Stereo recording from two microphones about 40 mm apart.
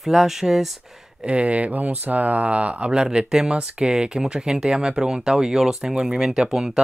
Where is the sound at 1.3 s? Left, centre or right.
Right.